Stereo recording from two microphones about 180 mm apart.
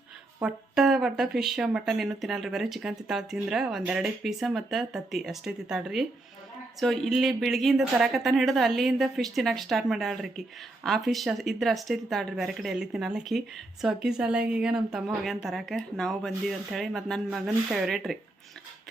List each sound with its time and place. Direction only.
0.4 s speech: centre (ahead or behind)